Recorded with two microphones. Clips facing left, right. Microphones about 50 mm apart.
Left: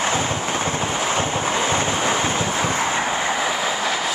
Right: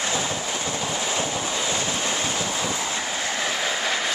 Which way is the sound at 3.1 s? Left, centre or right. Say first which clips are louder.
Left 6 dB; left.